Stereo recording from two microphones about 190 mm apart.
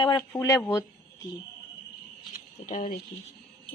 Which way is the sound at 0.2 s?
15° left (ahead or behind).